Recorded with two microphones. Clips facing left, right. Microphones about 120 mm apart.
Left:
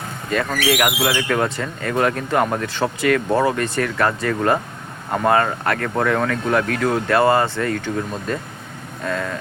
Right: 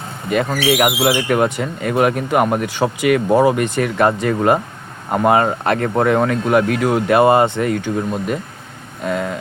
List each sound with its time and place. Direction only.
0.3 s speech: 15° right (ahead or behind)
9.0 s vehicle: 15° right (ahead or behind)